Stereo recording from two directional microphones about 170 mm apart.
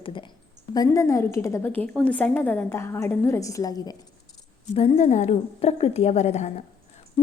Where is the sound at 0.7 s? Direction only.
20° left (ahead or behind).